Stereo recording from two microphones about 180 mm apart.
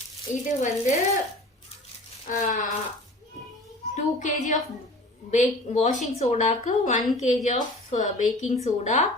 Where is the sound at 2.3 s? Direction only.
45° left (ahead or behind).